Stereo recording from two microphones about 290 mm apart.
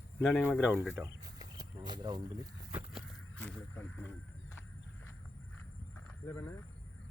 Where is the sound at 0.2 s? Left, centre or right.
Centre.